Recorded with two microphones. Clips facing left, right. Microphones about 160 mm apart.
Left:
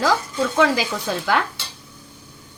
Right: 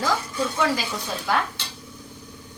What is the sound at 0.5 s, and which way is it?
Speech, 90° left.